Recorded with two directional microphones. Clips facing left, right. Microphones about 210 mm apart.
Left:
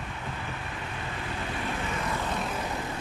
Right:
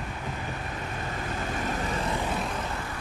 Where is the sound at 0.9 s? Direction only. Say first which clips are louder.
Right 2 dB; 45° right (ahead or behind).